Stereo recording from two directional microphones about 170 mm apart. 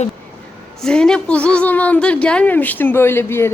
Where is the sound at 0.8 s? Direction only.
5° left (ahead or behind).